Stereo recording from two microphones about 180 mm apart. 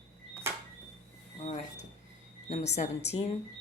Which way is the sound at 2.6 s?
40° left (ahead or behind).